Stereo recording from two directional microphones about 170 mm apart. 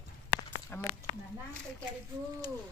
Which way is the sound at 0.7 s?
10° left (ahead or behind).